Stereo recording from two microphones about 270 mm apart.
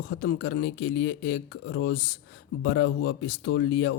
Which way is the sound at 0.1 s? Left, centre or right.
Left.